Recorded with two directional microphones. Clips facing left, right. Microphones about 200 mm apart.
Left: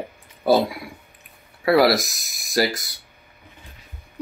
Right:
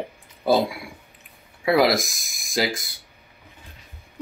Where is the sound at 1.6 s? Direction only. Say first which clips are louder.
Left 2 dB; 20° right (ahead or behind).